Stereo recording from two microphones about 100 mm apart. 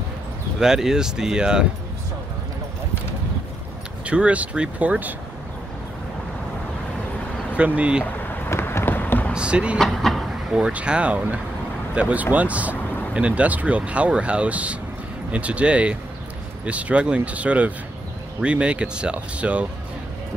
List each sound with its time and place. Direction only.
0.6 s speech: 5° right (ahead or behind)
4.0 s speech: 15° right (ahead or behind)
7.5 s speech: 15° right (ahead or behind)
8.0 s a sound: 25° left (ahead or behind)
9.3 s speech: 10° right (ahead or behind)
9.8 s speech: 5° left (ahead or behind)
10.5 s speech: 10° right (ahead or behind)